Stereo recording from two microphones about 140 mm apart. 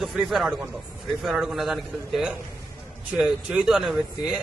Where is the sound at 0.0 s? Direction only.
Centre (ahead or behind).